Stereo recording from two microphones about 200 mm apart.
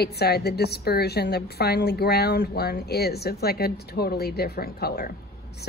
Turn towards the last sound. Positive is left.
turn(degrees=50)  # may be behind; listen again after turning